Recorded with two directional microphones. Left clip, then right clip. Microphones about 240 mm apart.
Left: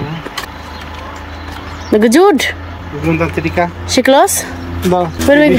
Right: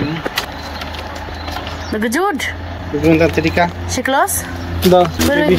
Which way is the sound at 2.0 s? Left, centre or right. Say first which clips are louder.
Left 9 dB; left.